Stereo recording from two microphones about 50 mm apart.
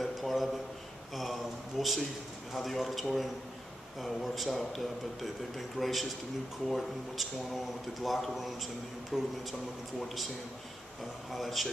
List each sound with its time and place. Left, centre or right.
0.0 s a sound: centre
2.5 s a man's voice: centre
11.3 s a man's voice: centre